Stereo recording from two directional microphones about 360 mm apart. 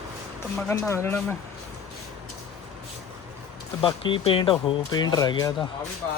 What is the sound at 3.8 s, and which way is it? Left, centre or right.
Speech, centre.